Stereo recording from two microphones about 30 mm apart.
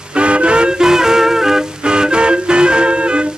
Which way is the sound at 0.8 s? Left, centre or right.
Centre.